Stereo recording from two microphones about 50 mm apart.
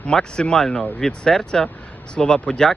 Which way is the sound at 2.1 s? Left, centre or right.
Left.